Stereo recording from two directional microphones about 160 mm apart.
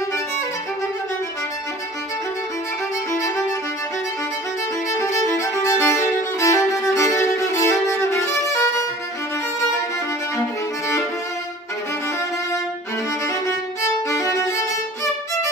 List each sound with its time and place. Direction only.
4.9 s violin: 20° left (ahead or behind)
14.0 s violin: 20° left (ahead or behind)